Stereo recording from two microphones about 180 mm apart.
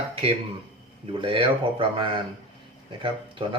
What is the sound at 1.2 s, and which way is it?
Speech, 30° right (ahead or behind).